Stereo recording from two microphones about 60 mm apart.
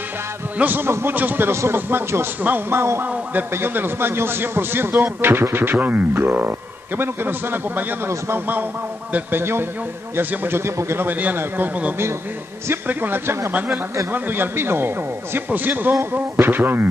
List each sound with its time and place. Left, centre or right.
0.6 s a man's voice: right
1.5 s a man's voice: right
9.1 s a man's voice: right
11.1 s a man's voice: right